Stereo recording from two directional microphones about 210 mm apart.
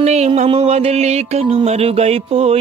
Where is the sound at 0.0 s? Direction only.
30° right (ahead or behind).